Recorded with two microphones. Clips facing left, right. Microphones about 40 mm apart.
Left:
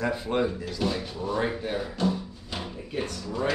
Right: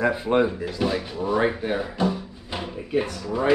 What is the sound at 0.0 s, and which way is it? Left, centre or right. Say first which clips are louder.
Speech: right 6 dB; right.